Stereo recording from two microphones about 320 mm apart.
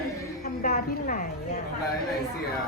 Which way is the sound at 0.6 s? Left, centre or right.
Left.